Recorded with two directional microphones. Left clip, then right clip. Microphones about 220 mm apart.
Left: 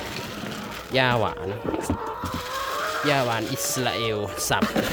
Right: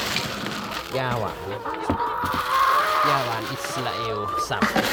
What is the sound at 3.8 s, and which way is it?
Speech, 40° left (ahead or behind).